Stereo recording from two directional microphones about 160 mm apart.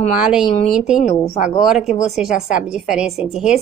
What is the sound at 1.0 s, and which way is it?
Speech, 50° left (ahead or behind).